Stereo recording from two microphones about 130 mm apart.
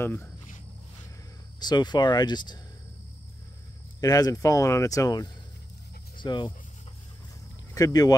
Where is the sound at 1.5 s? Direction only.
35° left (ahead or behind).